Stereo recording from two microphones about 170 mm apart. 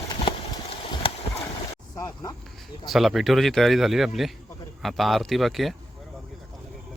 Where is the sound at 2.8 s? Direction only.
Centre (ahead or behind).